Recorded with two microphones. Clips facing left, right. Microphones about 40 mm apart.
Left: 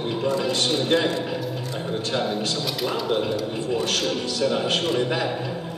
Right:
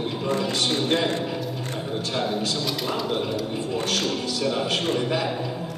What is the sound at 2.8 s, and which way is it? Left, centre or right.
Speech, centre.